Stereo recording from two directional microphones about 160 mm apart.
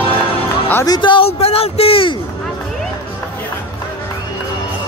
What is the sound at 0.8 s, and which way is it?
Speech, 30° left (ahead or behind).